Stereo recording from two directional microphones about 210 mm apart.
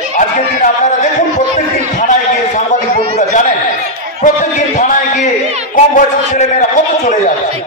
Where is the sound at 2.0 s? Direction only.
35° left (ahead or behind).